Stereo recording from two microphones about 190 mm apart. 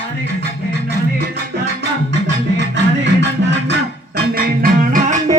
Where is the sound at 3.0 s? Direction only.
65° right (ahead or behind); by 5.1 s 45° right (ahead or behind).